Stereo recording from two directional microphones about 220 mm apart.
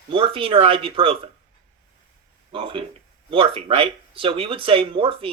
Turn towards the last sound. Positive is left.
turn(degrees=-25)  # may be behind; listen again after turning